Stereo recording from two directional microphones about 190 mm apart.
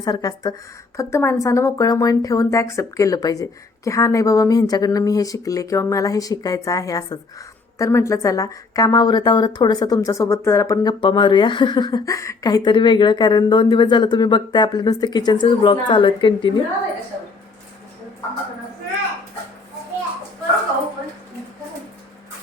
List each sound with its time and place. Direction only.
0.0 s speech: 20° left (ahead or behind)